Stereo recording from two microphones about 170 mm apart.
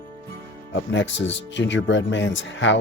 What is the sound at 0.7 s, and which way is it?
Speech, 90° left.